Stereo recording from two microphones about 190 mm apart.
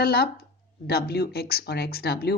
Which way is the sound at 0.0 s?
55° left (ahead or behind).